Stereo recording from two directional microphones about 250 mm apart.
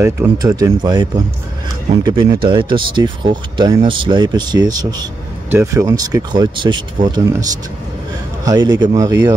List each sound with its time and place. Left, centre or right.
0.0 s speech: centre
8.5 s speech: centre